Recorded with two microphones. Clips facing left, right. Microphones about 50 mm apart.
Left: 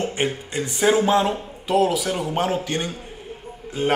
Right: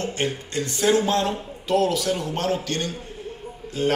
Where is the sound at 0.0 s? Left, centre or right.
Centre.